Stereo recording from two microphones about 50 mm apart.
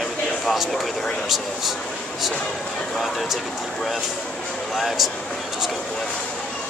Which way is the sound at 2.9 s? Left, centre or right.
Centre.